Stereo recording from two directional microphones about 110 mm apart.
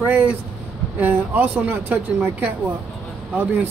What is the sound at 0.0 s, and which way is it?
Speech, 15° right (ahead or behind).